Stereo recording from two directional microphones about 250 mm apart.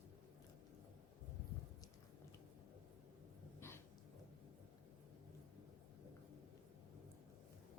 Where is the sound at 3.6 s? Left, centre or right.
Centre.